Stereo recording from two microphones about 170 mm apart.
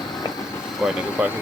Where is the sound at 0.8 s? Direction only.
Centre (ahead or behind).